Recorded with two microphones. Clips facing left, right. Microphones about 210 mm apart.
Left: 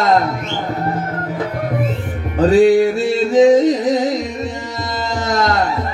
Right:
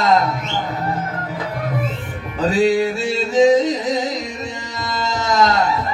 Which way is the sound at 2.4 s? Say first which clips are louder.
Left 6 dB; 55° left (ahead or behind).